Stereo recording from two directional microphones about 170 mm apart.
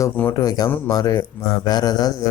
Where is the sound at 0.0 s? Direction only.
15° left (ahead or behind).